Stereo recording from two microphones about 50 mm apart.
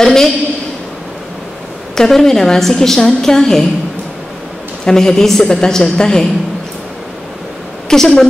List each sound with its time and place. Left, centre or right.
0.0 s a woman's voice: centre
2.0 s a woman's voice: centre
4.8 s a woman's voice: centre
7.9 s a woman's voice: centre